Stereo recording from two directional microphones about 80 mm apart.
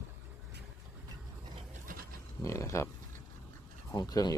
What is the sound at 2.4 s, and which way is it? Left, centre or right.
Speech, left.